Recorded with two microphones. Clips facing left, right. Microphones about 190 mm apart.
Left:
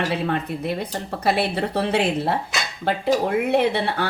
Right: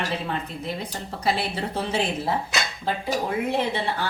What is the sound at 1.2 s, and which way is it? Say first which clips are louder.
A woman's voice: left 4 dB; 65° left (ahead or behind).